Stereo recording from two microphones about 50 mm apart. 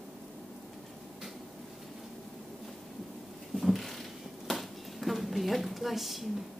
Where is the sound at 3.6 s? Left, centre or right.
Centre.